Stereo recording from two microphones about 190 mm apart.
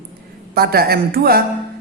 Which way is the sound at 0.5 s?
55° right (ahead or behind).